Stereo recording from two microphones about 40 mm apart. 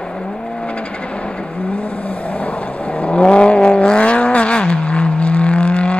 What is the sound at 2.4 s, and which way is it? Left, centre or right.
Vehicle, left.